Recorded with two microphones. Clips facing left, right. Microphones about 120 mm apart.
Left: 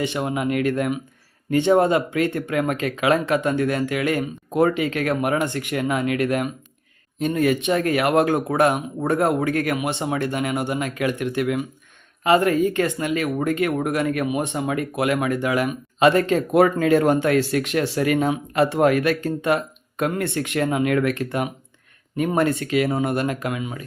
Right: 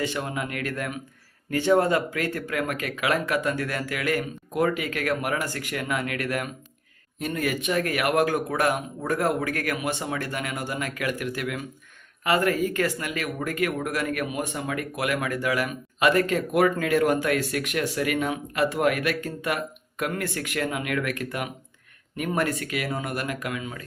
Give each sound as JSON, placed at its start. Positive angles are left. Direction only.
{"t": 0.0, "sound": "speech", "side_deg": 20}